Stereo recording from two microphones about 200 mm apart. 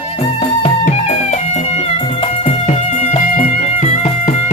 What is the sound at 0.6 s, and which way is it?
Music, 35° left (ahead or behind).